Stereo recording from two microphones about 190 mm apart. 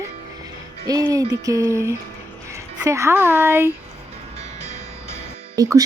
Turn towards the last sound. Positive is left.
turn(degrees=-20)  # may be behind; listen again after turning